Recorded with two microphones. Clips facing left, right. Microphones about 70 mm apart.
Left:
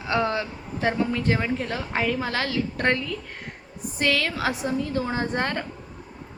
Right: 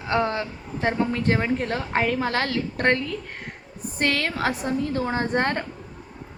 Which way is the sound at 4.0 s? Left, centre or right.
Right.